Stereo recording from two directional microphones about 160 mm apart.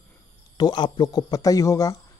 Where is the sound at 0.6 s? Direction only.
25° left (ahead or behind).